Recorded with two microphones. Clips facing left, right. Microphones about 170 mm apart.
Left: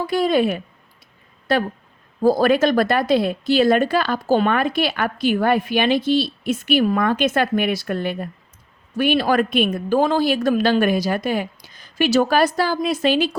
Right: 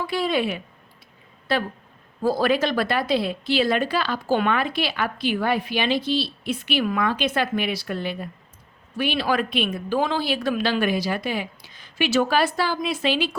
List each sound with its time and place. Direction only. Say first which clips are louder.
0.1 s speech: left 6 dB; 45° left (ahead or behind)